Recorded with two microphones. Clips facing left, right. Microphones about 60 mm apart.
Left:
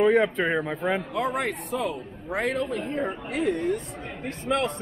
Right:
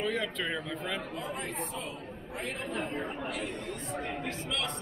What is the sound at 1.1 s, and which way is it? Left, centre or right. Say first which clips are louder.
Speech: left 10 dB; left.